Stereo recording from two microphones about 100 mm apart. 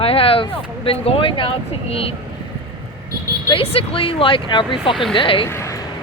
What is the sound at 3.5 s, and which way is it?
Speech, 65° left (ahead or behind).